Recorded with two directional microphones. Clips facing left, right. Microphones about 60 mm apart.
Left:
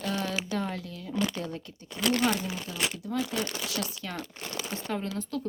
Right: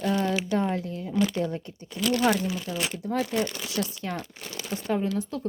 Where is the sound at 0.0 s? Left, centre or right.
Right.